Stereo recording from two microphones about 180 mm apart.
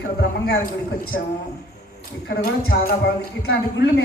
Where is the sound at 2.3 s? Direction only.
60° left (ahead or behind).